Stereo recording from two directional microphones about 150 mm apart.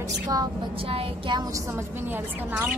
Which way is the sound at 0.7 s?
40° right (ahead or behind).